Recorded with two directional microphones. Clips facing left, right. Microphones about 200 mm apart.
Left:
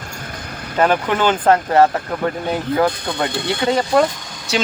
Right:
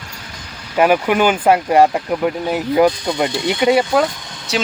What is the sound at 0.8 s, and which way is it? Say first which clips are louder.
Speech: right 3 dB; 10° right (ahead or behind).